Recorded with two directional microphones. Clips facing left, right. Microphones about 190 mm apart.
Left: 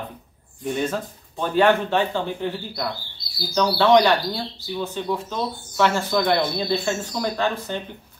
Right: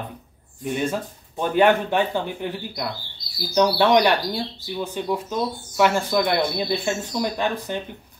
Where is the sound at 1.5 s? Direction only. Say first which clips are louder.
Even; 15° right (ahead or behind).